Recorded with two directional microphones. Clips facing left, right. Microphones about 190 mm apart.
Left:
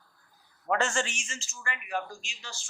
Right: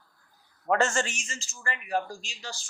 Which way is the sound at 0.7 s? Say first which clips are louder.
Right 3 dB; 45° right (ahead or behind).